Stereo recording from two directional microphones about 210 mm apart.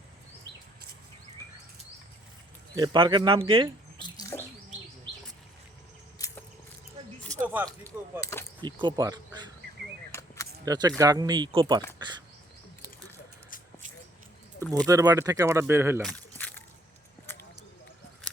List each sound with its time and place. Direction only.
2.7 s speech: 20° right (ahead or behind)
4.0 s bird: 15° left (ahead or behind)
6.1 s a sound: 15° left (ahead or behind)
7.3 s a sound: 10° right (ahead or behind)
8.2 s speech: 15° left (ahead or behind)
8.6 s speech: 20° right (ahead or behind)
10.1 s cap gun: 15° left (ahead or behind)
10.7 s speech: 15° right (ahead or behind)
14.8 s speech: 15° right (ahead or behind)
16.0 s a sound: 5° left (ahead or behind)